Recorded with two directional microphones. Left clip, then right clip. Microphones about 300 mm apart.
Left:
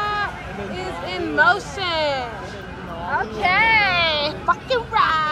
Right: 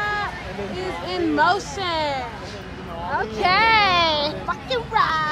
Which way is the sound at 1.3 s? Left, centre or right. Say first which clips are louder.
Left 4 dB; centre.